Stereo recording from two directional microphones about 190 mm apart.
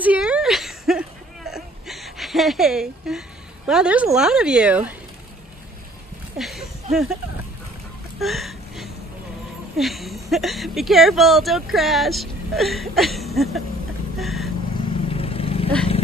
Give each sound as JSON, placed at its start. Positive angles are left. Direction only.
{"t": 0.0, "sound": "whimper", "side_deg": -5}
{"t": 6.3, "sound": "a sound", "side_deg": 0}
{"t": 8.2, "sound": "a sound", "side_deg": 0}
{"t": 9.8, "sound": "speech", "side_deg": 0}
{"t": 14.1, "sound": "vehicle", "side_deg": 0}
{"t": 15.0, "sound": "vehicle", "side_deg": 30}